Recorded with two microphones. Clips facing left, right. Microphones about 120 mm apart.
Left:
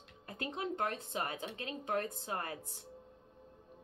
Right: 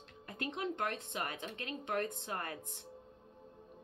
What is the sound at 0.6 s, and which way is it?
Speech, 30° left (ahead or behind).